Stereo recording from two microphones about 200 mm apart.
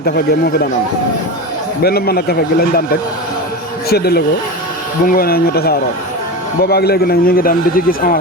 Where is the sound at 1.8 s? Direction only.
50° left (ahead or behind).